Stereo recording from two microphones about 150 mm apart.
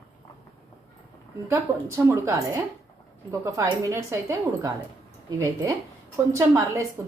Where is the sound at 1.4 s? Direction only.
15° right (ahead or behind).